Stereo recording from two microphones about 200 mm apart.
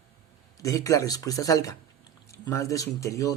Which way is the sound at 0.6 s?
15° left (ahead or behind).